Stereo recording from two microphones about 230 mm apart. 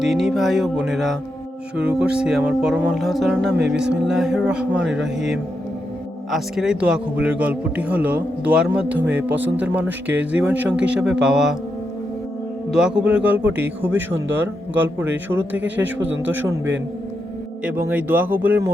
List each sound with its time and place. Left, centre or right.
0.0 s speech: centre
6.3 s speech: centre
12.7 s a man's voice: centre
16.0 s speech: right
16.3 s a man's voice: centre